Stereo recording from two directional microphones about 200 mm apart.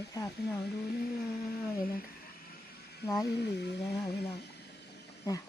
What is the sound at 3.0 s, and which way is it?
Speech, 20° left (ahead or behind).